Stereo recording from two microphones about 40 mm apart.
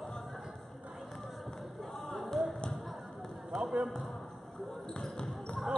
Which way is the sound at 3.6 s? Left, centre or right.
Centre.